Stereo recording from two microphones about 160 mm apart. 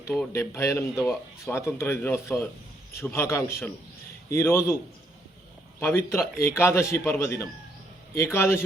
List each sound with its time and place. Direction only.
0.3 s speech: 15° left (ahead or behind)
5.8 s speech: 15° left (ahead or behind)